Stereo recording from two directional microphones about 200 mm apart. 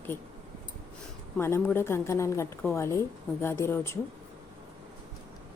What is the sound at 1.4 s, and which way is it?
A woman's voice, 10° left (ahead or behind).